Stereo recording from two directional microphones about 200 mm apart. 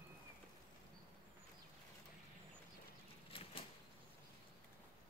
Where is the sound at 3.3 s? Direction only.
25° left (ahead or behind).